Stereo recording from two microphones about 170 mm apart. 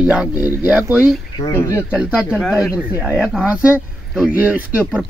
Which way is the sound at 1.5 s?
20° left (ahead or behind).